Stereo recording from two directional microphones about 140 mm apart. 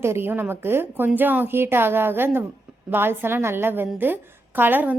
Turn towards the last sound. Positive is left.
turn(degrees=-15)  # may be behind; listen again after turning